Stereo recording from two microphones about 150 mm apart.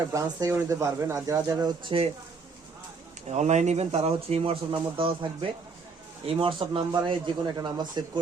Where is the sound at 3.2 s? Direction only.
50° right (ahead or behind).